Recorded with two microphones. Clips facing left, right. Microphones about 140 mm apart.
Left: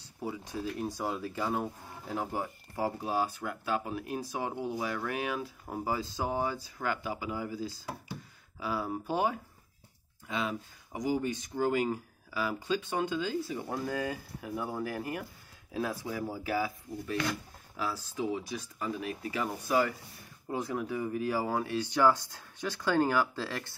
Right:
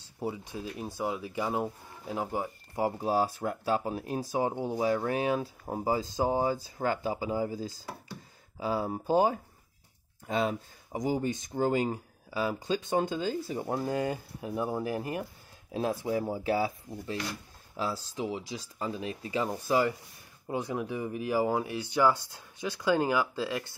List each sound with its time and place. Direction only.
0.7 s speech: 5° right (ahead or behind)
1.0 s speech: 15° right (ahead or behind)
3.0 s speech: 35° right (ahead or behind)
8.5 s speech: 30° right (ahead or behind)
11.5 s speech: 25° right (ahead or behind); by 23.6 s 10° right (ahead or behind)